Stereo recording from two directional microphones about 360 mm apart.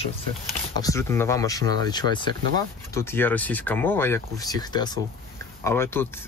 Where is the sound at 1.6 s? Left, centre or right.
Right.